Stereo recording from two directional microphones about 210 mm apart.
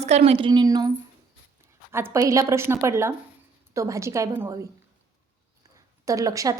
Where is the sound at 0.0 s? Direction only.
30° right (ahead or behind).